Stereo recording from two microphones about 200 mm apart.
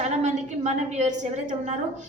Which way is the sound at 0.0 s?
35° right (ahead or behind).